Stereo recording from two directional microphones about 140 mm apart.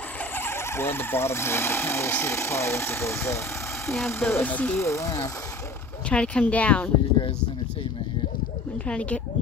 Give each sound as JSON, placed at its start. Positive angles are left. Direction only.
{"t": 0.3, "sound": "speech", "side_deg": 15}
{"t": 6.0, "sound": "speech", "side_deg": 10}
{"t": 8.8, "sound": "speech", "side_deg": 10}